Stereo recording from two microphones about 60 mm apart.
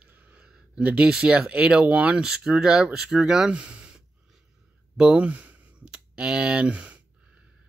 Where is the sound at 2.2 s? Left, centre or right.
Centre.